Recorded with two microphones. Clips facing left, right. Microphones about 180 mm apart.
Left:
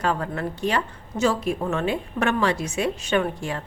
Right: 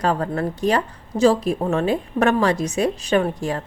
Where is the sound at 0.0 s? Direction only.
40° right (ahead or behind).